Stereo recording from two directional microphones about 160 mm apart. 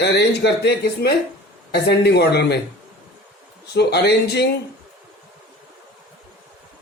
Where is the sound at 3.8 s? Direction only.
90° left.